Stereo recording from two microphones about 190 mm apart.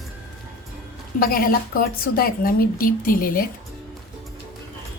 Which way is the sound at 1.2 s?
50° left (ahead or behind).